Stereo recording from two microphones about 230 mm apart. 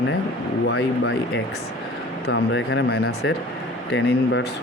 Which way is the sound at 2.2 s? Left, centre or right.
Left.